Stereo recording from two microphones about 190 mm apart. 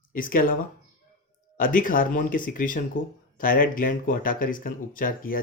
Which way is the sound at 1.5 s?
45° left (ahead or behind).